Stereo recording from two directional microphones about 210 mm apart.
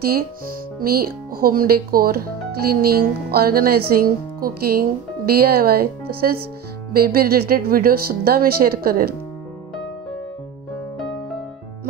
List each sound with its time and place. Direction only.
0.7 s speech: 45° right (ahead or behind)